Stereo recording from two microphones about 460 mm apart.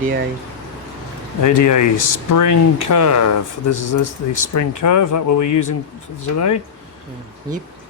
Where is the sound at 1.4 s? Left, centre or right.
Left.